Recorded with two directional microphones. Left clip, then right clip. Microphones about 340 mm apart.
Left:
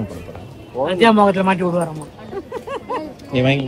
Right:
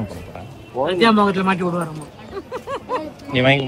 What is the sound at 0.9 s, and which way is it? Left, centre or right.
Speech, centre.